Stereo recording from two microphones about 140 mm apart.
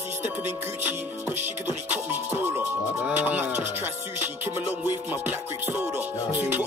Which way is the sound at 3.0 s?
10° right (ahead or behind).